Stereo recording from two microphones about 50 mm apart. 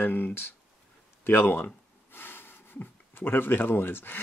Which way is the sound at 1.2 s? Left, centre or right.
Left.